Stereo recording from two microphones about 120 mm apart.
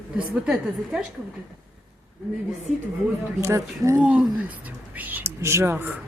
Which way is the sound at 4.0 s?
10° right (ahead or behind).